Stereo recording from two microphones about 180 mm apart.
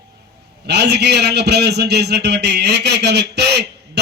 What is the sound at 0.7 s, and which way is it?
A man's voice, 70° right (ahead or behind).